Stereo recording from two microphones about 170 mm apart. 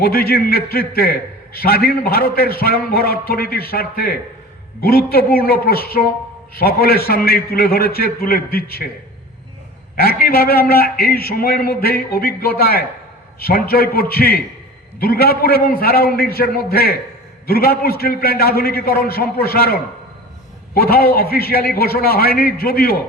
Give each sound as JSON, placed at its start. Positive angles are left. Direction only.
{"t": 0.0, "sound": "a man's voice", "side_deg": 65}
{"t": 10.0, "sound": "a man's voice", "side_deg": 60}
{"t": 20.7, "sound": "a man's voice", "side_deg": 60}